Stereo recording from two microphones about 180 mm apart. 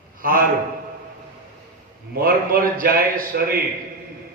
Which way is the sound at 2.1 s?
55° right (ahead or behind).